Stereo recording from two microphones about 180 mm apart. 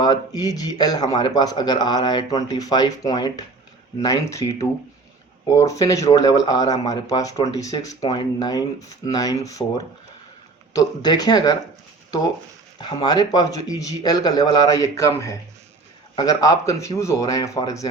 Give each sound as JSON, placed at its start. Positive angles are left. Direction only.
{"t": 0.0, "sound": "speech", "side_deg": 20}
{"t": 12.8, "sound": "speech", "side_deg": 25}